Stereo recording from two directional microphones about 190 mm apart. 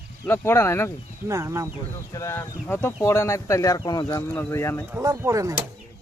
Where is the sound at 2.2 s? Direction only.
15° left (ahead or behind).